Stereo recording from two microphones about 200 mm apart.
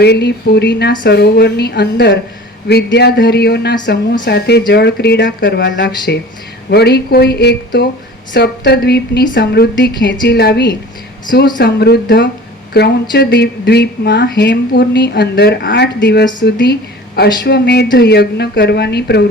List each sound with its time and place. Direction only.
0.0 s a woman's voice: 55° left (ahead or behind)